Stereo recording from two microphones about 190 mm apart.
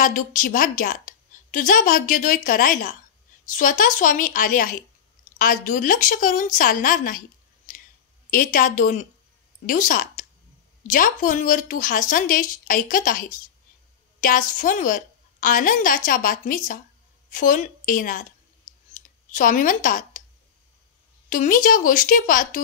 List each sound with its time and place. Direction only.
0.0 s a woman's voice: 45° left (ahead or behind)
18.9 s clicking: 45° left (ahead or behind)
21.3 s a woman's voice: 45° left (ahead or behind)